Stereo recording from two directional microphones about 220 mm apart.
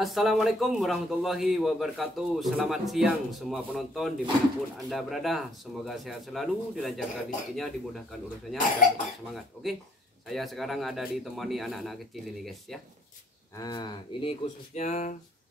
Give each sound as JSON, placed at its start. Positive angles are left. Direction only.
{"t": 0.0, "sound": "a man's voice", "side_deg": 0}
{"t": 8.5, "sound": "speech", "side_deg": 35}
{"t": 9.3, "sound": "a man's voice", "side_deg": 0}
{"t": 13.6, "sound": "speech", "side_deg": 20}
{"t": 14.7, "sound": "speech", "side_deg": 30}